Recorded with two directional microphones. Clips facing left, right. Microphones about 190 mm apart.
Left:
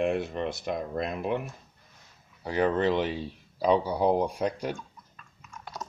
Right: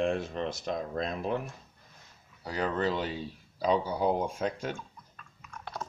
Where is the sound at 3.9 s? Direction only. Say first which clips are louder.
Left 4 dB; 35° left (ahead or behind).